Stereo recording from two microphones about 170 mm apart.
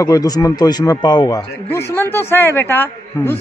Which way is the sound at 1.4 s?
10° left (ahead or behind).